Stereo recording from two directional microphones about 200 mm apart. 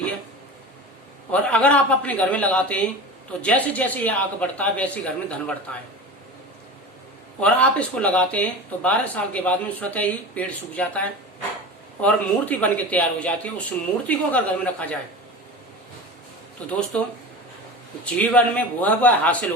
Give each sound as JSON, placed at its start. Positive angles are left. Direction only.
{"t": 1.3, "sound": "speech", "side_deg": 5}
{"t": 7.3, "sound": "speech", "side_deg": 5}
{"t": 16.6, "sound": "speech", "side_deg": 5}
{"t": 18.0, "sound": "speech", "side_deg": 5}